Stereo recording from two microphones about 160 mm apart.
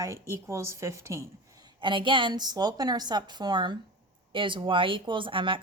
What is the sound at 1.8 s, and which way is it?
A woman's voice, 30° right (ahead or behind).